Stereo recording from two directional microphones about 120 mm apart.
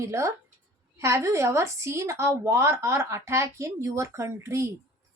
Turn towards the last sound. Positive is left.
turn(degrees=-25)  # may be behind; listen again after turning